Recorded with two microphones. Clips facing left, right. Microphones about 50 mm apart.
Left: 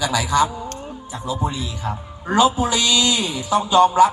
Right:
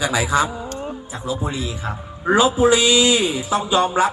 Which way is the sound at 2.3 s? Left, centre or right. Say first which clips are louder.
Right 2 dB; right.